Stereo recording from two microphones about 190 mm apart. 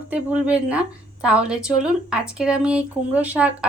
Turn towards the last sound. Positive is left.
turn(degrees=-5)  # may be behind; listen again after turning